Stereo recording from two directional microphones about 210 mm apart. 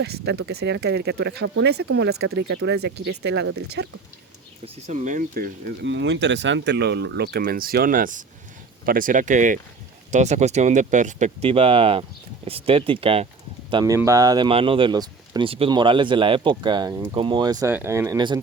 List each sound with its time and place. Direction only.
0.3 s speech: 50° right (ahead or behind)
4.6 s speech: 35° right (ahead or behind)
5.8 s speech: 60° right (ahead or behind); by 18.3 s 20° right (ahead or behind)